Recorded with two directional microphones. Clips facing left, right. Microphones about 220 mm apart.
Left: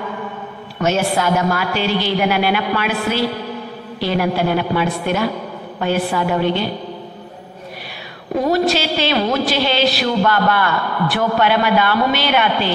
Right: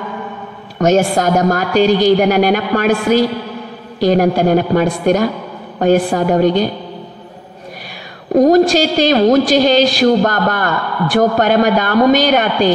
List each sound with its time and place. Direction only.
0.7 s a woman's voice: 45° right (ahead or behind)
8.4 s a woman's voice: 45° right (ahead or behind)